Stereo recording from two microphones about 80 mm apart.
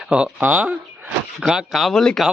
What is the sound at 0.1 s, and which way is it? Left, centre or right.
Speech, centre.